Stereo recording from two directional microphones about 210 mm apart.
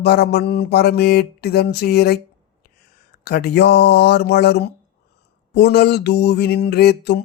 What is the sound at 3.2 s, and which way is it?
Mantra, 50° left (ahead or behind).